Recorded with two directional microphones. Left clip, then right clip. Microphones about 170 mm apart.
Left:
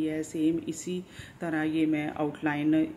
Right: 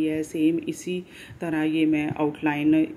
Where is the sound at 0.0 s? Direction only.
10° right (ahead or behind).